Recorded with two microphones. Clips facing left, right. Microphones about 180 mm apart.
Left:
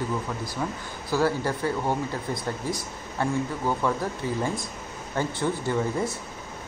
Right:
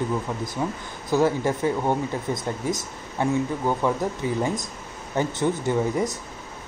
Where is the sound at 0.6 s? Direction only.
15° right (ahead or behind).